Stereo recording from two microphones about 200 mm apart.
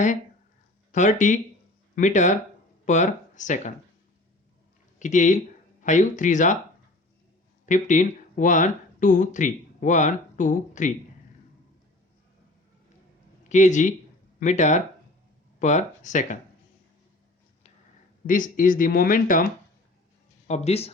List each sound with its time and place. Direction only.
0.9 s speech: 40° left (ahead or behind)
4.9 s speech: 40° left (ahead or behind)
7.6 s speech: 40° left (ahead or behind)
13.5 s speech: 35° left (ahead or behind)
18.3 s speech: 40° left (ahead or behind)
20.5 s speech: 30° left (ahead or behind)